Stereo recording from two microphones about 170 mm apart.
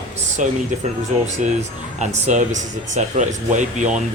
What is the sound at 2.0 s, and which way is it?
Speech, 45° right (ahead or behind).